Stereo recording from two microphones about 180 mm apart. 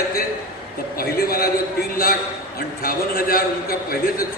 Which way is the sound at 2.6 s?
55° left (ahead or behind).